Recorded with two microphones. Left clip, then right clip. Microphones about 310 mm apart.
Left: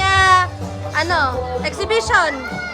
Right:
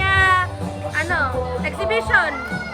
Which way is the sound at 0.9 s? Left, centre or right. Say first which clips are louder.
Left 4 dB; centre.